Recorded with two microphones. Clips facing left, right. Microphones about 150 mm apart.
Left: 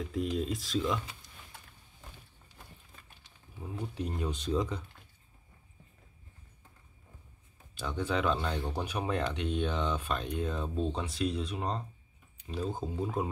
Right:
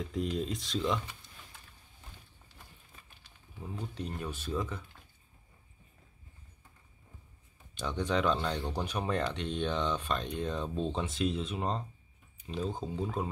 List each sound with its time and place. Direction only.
0.0 s speech: centre (ahead or behind)
3.7 s speech: 10° left (ahead or behind)
7.7 s speech: 5° left (ahead or behind)